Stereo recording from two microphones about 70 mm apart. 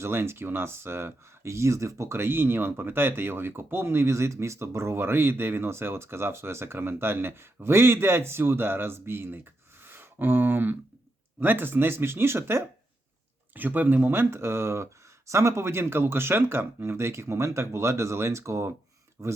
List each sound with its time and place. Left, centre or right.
0.0 s speech: right
13.5 s speech: right